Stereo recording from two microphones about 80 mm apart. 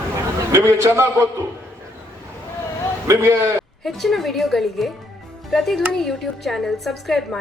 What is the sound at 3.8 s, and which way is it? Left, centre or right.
A woman's voice, centre.